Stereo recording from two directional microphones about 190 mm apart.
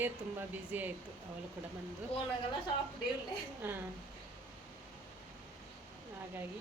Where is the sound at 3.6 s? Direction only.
10° right (ahead or behind).